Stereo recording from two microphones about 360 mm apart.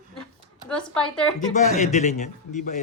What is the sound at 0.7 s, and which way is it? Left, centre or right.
Speech, centre.